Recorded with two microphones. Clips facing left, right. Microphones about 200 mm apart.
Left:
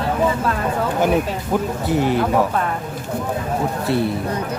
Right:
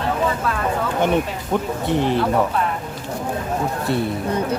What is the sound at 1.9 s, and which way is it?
Speech, 5° left (ahead or behind).